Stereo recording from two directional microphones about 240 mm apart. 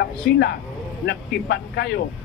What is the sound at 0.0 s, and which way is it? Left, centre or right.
Speech, left.